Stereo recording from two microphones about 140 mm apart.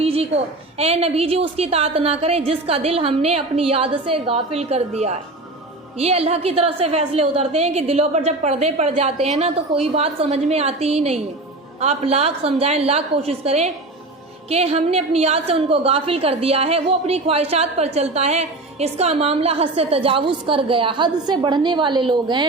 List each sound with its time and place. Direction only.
0.0 s a woman's voice: 45° right (ahead or behind)